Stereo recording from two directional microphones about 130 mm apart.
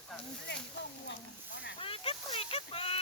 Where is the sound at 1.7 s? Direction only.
45° left (ahead or behind).